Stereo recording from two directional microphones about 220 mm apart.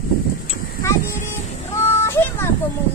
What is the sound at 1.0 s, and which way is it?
Speech, 35° left (ahead or behind).